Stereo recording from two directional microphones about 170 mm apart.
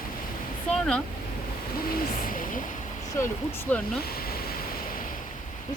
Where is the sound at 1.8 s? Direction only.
60° left (ahead or behind).